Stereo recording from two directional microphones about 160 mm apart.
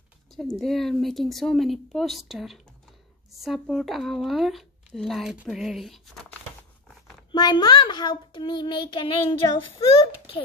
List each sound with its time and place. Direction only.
0.4 s speech: centre (ahead or behind)
7.3 s child singing: 25° left (ahead or behind)